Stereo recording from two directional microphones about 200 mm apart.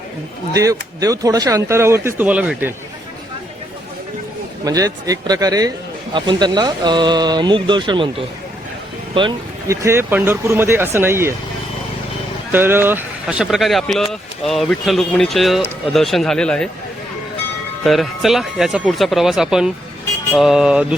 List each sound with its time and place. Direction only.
0.5 s speech: 15° right (ahead or behind)
4.6 s speech: 15° right (ahead or behind)
9.1 s speech: 25° right (ahead or behind)
9.8 s speech: 10° right (ahead or behind)
12.5 s speech: 10° right (ahead or behind)
17.8 s speech: centre (ahead or behind)